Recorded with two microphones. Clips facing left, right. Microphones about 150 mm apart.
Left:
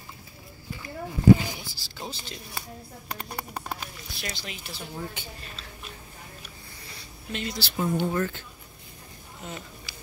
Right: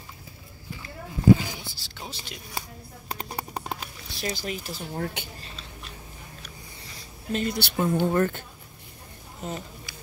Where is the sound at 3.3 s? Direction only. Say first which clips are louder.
Right 2 dB; 25° right (ahead or behind).